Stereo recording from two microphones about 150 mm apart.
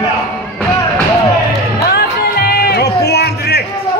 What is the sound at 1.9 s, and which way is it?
Music, 90° left.